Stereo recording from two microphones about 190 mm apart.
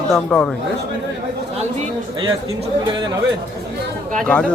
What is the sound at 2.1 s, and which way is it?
A man's voice, 20° right (ahead or behind).